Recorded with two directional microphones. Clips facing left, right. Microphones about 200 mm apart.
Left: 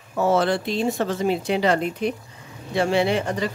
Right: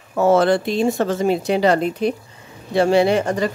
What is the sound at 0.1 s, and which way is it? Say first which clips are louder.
Speech: right 5 dB; 50° right (ahead or behind).